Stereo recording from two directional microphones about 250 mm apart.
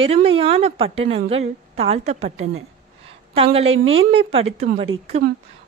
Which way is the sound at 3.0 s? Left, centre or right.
Right.